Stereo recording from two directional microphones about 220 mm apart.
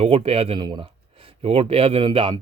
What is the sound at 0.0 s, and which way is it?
Speech, 25° right (ahead or behind).